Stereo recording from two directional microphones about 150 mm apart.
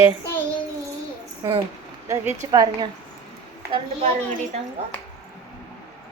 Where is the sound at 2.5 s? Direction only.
25° right (ahead or behind).